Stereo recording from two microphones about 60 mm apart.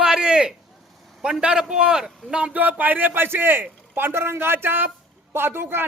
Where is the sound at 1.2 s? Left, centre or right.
Centre.